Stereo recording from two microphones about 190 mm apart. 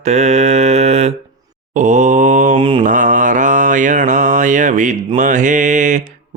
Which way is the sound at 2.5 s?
25° right (ahead or behind).